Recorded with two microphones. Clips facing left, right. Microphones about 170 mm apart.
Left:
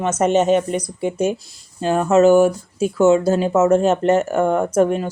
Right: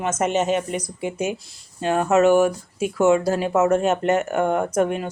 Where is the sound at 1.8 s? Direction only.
30° left (ahead or behind).